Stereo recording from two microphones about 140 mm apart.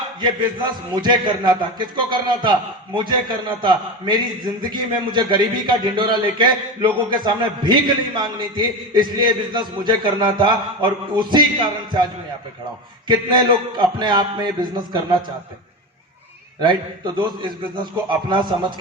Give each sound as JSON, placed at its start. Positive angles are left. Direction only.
{"t": 0.2, "sound": "a man's voice", "side_deg": -35}
{"t": 13.1, "sound": "a man's voice", "side_deg": -30}
{"t": 17.2, "sound": "a man's voice", "side_deg": -35}